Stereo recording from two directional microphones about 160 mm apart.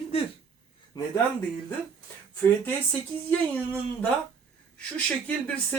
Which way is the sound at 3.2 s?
10° left (ahead or behind).